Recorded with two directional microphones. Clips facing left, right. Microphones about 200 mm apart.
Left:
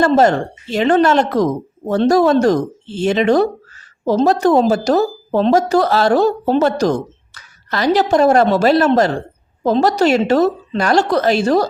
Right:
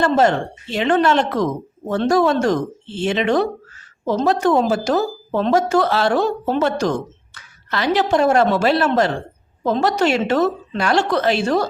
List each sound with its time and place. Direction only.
0.0 s a woman's voice: 40° left (ahead or behind)